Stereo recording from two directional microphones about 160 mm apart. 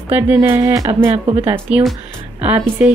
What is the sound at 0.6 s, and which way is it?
Speech, 25° right (ahead or behind).